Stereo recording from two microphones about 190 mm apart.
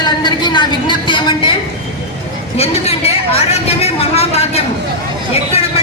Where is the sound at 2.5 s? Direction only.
35° left (ahead or behind).